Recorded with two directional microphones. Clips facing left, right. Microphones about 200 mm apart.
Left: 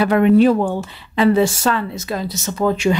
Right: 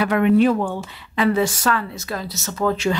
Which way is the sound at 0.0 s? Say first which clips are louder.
Left 4 dB; 35° left (ahead or behind).